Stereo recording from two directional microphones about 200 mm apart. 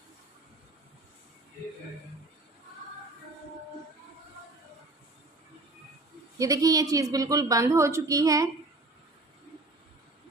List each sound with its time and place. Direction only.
6.4 s a woman's voice: 15° right (ahead or behind)